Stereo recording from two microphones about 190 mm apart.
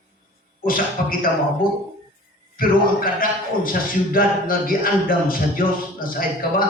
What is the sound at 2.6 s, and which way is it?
A man's voice, 50° left (ahead or behind).